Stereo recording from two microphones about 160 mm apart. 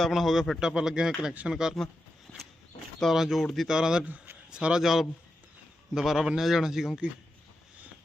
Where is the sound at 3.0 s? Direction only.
Centre (ahead or behind).